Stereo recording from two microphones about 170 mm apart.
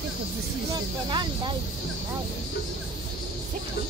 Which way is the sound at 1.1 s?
25° right (ahead or behind).